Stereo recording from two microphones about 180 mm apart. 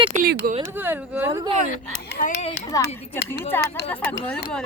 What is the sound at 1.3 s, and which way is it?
Speech, 30° right (ahead or behind).